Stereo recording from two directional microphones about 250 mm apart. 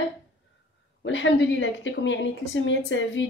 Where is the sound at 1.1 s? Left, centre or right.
Left.